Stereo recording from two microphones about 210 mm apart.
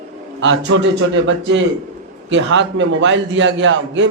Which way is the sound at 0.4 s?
60° right (ahead or behind).